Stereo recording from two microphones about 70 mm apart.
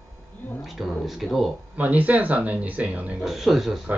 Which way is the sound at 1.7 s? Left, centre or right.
Right.